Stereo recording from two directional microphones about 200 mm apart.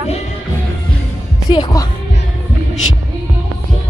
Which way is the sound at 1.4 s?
20° left (ahead or behind).